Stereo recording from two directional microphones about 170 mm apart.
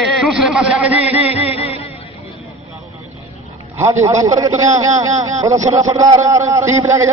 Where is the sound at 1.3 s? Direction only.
35° left (ahead or behind).